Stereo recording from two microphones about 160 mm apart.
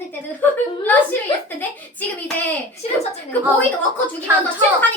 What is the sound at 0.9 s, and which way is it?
Speech, 10° left (ahead or behind).